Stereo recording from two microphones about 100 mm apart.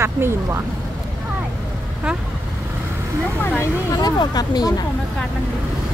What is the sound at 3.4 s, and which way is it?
Speech, 20° left (ahead or behind).